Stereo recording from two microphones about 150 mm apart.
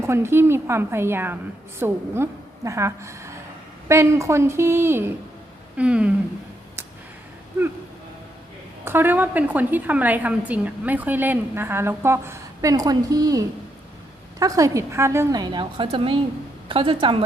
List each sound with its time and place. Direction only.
0.0 s a woman's voice: 15° right (ahead or behind)
8.8 s a woman's voice: 15° right (ahead or behind); by 17.2 s 35° right (ahead or behind)